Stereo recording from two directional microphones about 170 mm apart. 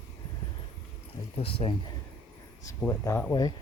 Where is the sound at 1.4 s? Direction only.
35° left (ahead or behind).